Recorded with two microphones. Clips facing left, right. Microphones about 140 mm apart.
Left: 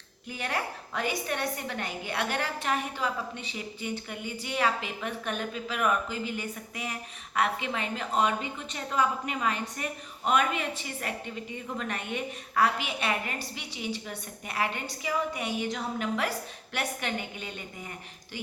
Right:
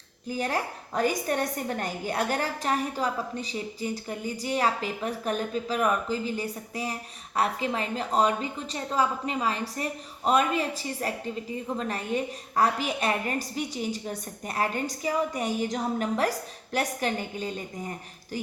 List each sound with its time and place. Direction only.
0.3 s a woman's voice: 35° right (ahead or behind)